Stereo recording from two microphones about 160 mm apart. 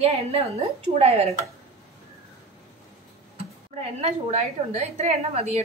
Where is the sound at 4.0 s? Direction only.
40° right (ahead or behind).